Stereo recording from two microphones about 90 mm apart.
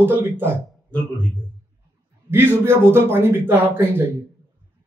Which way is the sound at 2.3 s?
25° right (ahead or behind).